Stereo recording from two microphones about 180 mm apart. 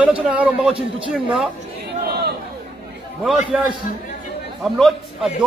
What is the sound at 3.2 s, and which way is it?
Speech, 5° right (ahead or behind).